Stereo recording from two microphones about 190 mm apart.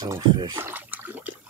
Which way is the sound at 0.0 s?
20° right (ahead or behind).